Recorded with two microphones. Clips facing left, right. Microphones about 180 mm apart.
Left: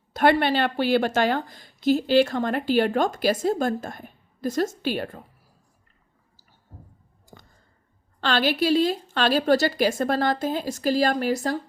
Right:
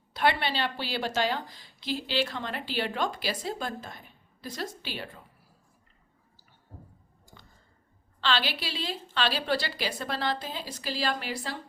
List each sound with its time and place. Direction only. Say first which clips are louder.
0.1 s a woman's voice: left 8 dB; 45° left (ahead or behind)
7.3 s a sound: left 6 dB; 45° left (ahead or behind)
8.2 s a woman's voice: left 8 dB; 50° left (ahead or behind)